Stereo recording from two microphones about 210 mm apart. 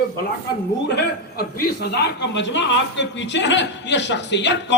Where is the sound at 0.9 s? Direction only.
50° left (ahead or behind).